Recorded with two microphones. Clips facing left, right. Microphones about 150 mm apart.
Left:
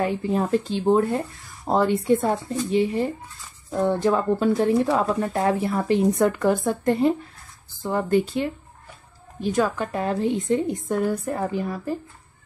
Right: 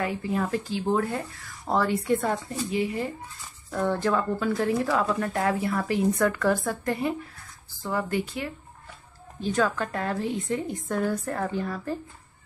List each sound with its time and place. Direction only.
0.0 s speech: 25° left (ahead or behind)
9.4 s a woman's voice: 15° left (ahead or behind)